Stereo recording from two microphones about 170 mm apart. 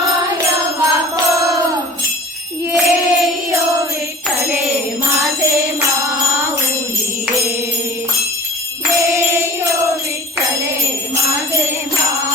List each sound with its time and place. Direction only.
0.8 s music: 20° right (ahead or behind)
2.7 s music: centre (ahead or behind)
9.0 s jingle bell: 15° right (ahead or behind)
11.3 s jingle bell: 15° right (ahead or behind)